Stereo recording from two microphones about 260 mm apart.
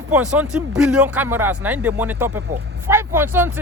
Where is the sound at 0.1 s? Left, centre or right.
Centre.